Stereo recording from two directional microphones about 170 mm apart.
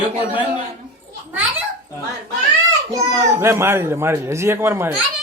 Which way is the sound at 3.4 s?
15° right (ahead or behind).